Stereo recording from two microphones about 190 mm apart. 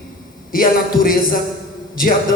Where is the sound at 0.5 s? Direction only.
50° left (ahead or behind).